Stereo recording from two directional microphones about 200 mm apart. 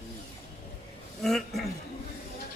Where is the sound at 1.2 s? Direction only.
Centre (ahead or behind).